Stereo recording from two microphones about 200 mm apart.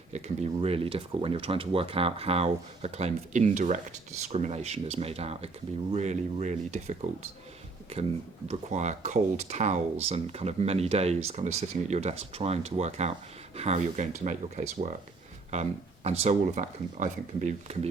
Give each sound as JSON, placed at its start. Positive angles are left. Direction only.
{"t": 0.1, "sound": "speech", "side_deg": -30}
{"t": 8.4, "sound": "speech", "side_deg": -35}
{"t": 16.0, "sound": "speech", "side_deg": -35}